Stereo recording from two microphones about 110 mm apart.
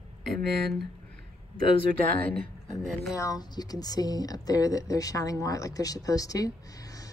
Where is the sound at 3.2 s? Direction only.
35° left (ahead or behind).